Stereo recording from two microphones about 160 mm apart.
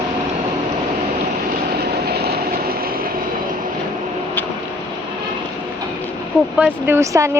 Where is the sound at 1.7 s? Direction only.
90° right; by 3.1 s 65° right (ahead or behind).